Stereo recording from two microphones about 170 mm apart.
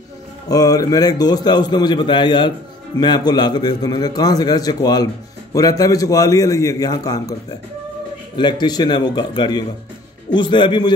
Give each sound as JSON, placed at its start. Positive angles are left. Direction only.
{"t": 0.5, "sound": "a man's voice", "side_deg": 20}
{"t": 8.4, "sound": "a man's voice", "side_deg": 25}